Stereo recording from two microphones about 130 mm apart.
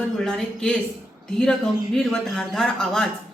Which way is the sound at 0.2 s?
5° left (ahead or behind).